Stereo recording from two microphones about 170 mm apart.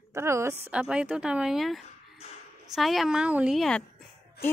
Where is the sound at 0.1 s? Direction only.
15° right (ahead or behind); by 3.8 s centre (ahead or behind).